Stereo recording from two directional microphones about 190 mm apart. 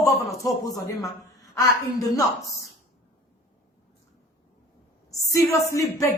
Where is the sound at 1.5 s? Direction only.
20° left (ahead or behind).